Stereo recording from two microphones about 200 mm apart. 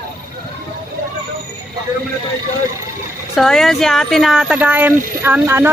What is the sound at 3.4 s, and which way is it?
Speech, centre (ahead or behind).